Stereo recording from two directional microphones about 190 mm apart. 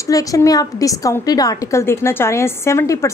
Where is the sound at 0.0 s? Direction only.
20° left (ahead or behind).